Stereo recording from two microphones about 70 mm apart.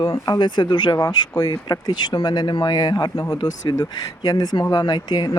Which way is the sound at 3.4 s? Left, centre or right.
Left.